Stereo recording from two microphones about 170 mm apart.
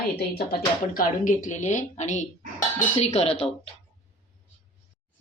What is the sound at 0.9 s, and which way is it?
A woman's voice, 50° left (ahead or behind).